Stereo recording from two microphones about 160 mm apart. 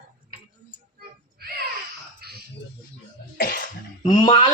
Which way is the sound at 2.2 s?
75° right (ahead or behind).